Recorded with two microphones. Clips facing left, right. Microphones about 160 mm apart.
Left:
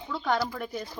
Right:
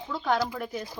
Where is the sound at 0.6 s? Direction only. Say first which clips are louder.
Right 1 dB; 5° right (ahead or behind).